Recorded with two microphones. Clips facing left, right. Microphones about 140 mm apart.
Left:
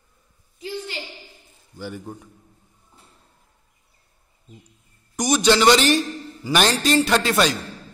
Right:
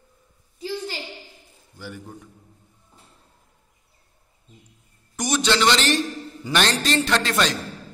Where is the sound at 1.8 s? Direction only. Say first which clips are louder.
Left 4 dB; 25° left (ahead or behind).